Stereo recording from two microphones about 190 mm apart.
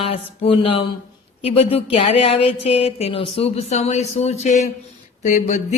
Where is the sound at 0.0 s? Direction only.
30° left (ahead or behind).